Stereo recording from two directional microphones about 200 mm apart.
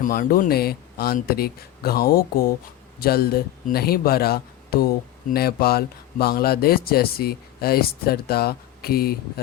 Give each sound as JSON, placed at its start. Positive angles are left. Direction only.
{"t": 0.0, "sound": "speech", "side_deg": 45}